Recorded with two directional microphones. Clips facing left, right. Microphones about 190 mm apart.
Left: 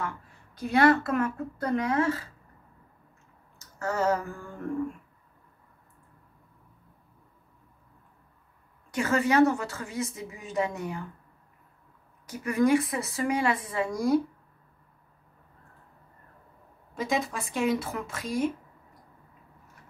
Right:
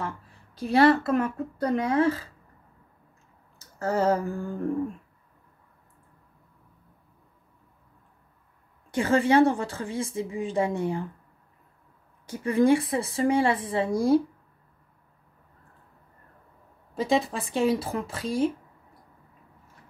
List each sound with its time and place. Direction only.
0.6 s speech: 30° right (ahead or behind)
3.5 s a sound: 30° right (ahead or behind)
8.9 s a woman's voice: 30° right (ahead or behind)
12.3 s a woman's voice: 30° right (ahead or behind)
16.9 s speech: 30° right (ahead or behind)